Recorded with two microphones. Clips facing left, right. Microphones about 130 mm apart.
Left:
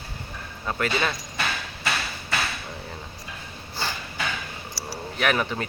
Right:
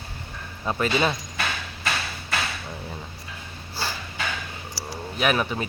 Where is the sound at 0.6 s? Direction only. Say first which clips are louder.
Right 3 dB; 20° right (ahead or behind).